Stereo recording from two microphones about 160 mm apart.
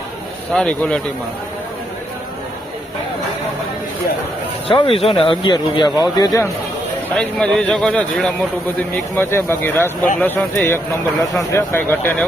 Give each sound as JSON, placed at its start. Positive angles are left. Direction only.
{"t": 0.5, "sound": "a man's voice", "side_deg": 5}
{"t": 4.7, "sound": "speech", "side_deg": 35}
{"t": 7.2, "sound": "a man's voice", "side_deg": 5}
{"t": 11.5, "sound": "speech", "side_deg": 15}